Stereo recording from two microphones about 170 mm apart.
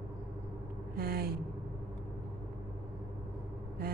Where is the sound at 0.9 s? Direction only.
65° right (ahead or behind).